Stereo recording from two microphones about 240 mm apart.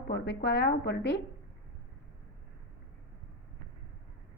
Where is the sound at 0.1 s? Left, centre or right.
Left.